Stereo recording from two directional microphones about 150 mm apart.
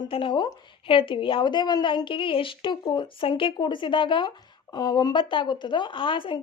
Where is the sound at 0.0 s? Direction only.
35° left (ahead or behind).